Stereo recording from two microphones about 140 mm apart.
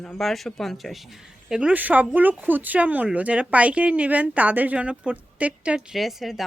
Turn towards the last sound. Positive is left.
turn(degrees=0)  # may be behind; listen again after turning